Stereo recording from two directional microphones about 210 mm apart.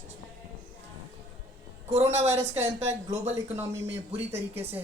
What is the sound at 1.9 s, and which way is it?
Speech, 30° right (ahead or behind).